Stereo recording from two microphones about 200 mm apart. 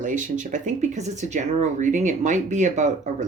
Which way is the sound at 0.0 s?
40° right (ahead or behind).